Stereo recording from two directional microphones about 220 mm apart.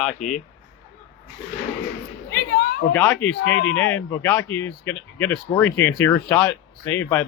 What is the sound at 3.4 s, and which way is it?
Speech, 55° left (ahead or behind).